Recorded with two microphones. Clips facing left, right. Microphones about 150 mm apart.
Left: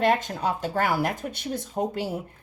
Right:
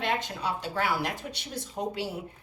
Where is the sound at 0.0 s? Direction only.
45° left (ahead or behind).